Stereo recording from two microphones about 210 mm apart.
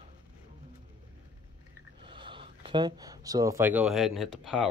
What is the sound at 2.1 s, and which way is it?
Speech, 25° right (ahead or behind).